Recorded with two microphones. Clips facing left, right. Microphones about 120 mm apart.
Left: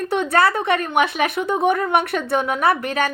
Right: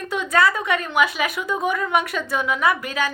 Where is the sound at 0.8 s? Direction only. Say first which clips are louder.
Left 2 dB; 50° left (ahead or behind).